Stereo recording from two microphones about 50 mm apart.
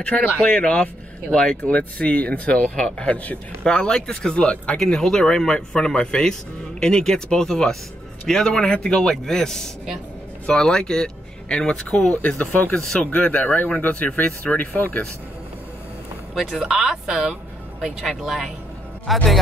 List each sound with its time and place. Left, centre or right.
0.0 s speech: left
1.7 s speech: left
4.7 s speech: centre
12.4 s speech: left
13.0 s speech: left
16.3 s speech: centre